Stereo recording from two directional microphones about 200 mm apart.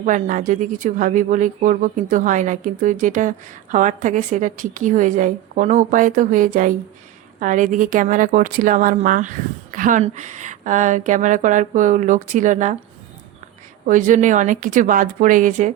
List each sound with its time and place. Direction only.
0.0 s speech: 40° right (ahead or behind)
13.8 s speech: 40° right (ahead or behind)